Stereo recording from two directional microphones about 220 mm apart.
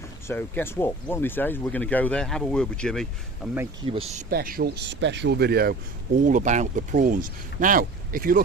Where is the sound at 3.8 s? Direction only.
25° right (ahead or behind).